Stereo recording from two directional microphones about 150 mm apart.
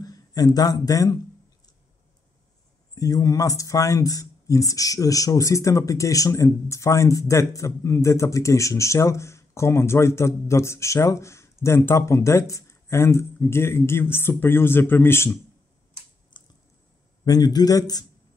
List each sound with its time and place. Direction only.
0.0 s a man's voice: 25° left (ahead or behind)
2.9 s speech: 25° left (ahead or behind)
16.3 s squish: 30° left (ahead or behind)
17.2 s speech: 25° left (ahead or behind)